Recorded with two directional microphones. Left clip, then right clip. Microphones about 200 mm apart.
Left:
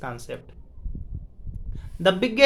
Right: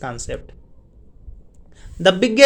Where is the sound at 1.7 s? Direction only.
25° right (ahead or behind).